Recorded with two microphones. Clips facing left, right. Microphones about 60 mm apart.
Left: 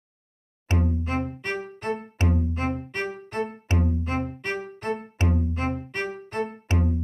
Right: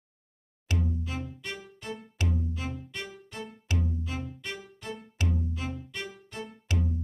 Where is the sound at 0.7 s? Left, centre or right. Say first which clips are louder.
Left 6 dB; left.